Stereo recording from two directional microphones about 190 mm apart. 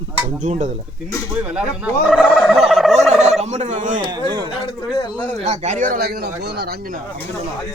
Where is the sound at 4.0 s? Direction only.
20° right (ahead or behind).